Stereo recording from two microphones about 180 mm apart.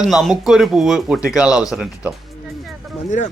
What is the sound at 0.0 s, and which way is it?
Speech, centre (ahead or behind).